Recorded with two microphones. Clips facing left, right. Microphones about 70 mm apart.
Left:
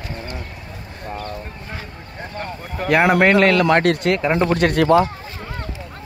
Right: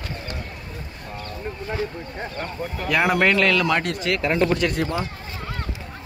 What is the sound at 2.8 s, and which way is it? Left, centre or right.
Speech, left.